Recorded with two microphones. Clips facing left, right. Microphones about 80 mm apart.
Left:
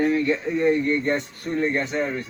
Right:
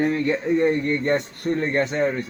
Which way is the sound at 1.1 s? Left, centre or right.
Right.